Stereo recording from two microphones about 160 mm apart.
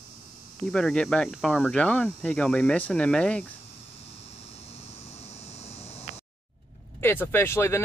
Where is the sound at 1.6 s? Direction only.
10° left (ahead or behind).